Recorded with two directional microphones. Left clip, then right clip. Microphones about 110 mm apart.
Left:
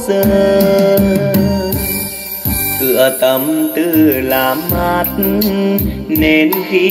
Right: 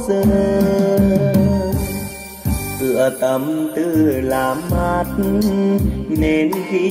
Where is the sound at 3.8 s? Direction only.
25° left (ahead or behind).